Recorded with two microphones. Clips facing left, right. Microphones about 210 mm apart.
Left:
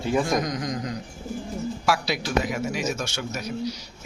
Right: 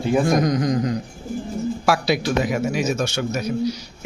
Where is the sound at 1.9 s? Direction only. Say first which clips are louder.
Right 6 dB; 55° right (ahead or behind).